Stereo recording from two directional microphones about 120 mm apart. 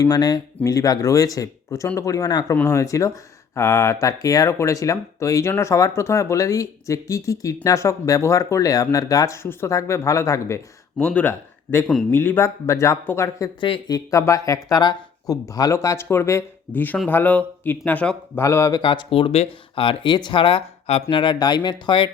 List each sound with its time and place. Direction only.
0.0 s speech: 30° left (ahead or behind)
11.0 s speech: 15° left (ahead or behind)
13.6 s speech: 45° left (ahead or behind)
13.9 s speech: 25° left (ahead or behind)
18.3 s speech: 25° left (ahead or behind)
18.8 s speech: 40° left (ahead or behind)